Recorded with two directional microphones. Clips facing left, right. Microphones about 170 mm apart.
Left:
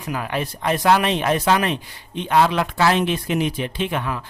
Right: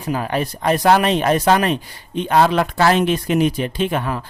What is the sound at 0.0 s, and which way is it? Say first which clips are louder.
Speech: right 4 dB; 30° right (ahead or behind).